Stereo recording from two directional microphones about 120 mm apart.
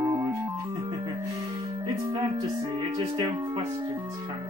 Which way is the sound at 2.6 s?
35° right (ahead or behind).